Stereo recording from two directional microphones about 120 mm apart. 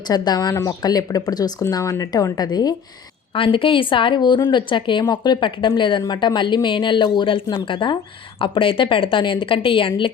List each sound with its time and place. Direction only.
0.1 s a woman's voice: 35° left (ahead or behind)
3.3 s a woman's voice: 45° left (ahead or behind)